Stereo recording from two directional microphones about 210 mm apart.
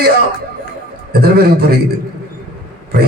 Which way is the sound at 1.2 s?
50° right (ahead or behind).